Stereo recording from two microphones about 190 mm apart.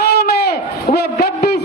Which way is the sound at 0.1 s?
55° left (ahead or behind).